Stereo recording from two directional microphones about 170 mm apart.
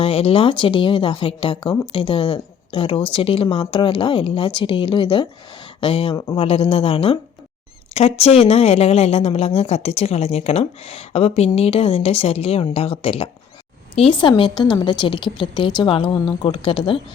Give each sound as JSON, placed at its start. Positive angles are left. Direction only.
{"t": 0.0, "sound": "a woman's voice", "side_deg": 35}
{"t": 6.1, "sound": "a woman's voice", "side_deg": 20}
{"t": 6.4, "sound": "a woman's voice", "side_deg": 35}